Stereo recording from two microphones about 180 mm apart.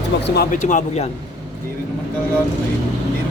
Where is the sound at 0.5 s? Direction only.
45° left (ahead or behind).